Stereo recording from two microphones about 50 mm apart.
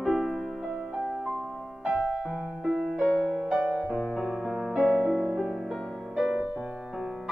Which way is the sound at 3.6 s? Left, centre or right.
Centre.